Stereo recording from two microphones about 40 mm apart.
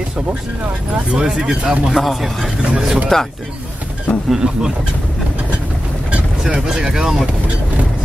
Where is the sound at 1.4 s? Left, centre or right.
Right.